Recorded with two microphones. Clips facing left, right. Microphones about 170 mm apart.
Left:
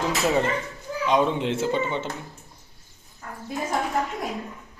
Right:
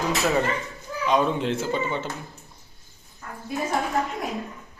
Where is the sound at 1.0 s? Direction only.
20° left (ahead or behind).